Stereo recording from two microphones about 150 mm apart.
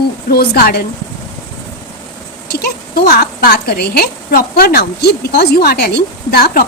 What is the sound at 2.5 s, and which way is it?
A woman's voice, 90° left.